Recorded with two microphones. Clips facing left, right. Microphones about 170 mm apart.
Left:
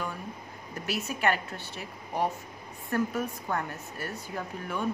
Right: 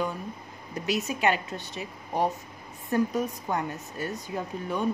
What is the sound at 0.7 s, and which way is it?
Speech, 20° right (ahead or behind).